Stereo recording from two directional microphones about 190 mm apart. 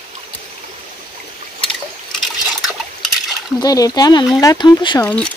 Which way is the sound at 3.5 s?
20° left (ahead or behind).